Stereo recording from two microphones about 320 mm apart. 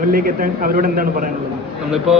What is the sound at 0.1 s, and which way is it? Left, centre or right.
Speech, right.